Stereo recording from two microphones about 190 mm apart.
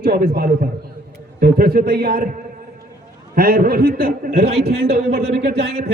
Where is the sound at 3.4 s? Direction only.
50° right (ahead or behind).